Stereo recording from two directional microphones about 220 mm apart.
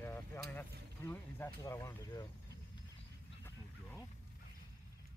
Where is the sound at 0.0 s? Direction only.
10° left (ahead or behind).